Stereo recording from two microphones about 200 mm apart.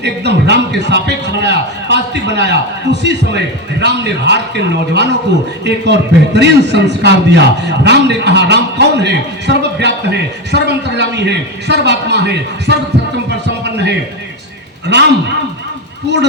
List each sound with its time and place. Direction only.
0.0 s a man's voice: 60° right (ahead or behind)
14.9 s a man's voice: 60° right (ahead or behind)